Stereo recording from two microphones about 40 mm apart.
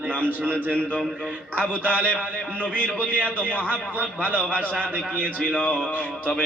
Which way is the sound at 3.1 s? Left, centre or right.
Right.